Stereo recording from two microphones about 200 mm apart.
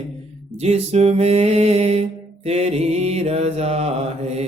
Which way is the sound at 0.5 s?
30° right (ahead or behind).